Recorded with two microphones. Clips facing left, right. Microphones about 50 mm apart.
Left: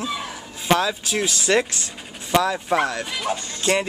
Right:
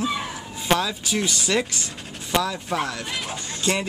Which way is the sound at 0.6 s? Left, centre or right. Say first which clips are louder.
Left 3 dB; centre.